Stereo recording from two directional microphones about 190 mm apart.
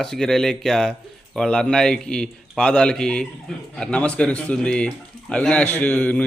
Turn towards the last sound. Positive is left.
turn(degrees=5)  # may be behind; listen again after turning